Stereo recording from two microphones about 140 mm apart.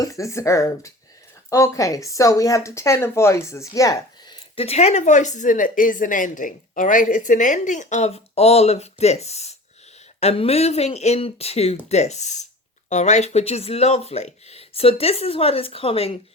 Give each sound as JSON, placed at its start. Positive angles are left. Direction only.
{"t": 0.0, "sound": "speech", "side_deg": 20}
{"t": 4.5, "sound": "a woman's voice", "side_deg": 45}